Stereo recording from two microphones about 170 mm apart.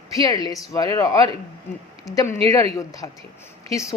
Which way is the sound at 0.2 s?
20° left (ahead or behind).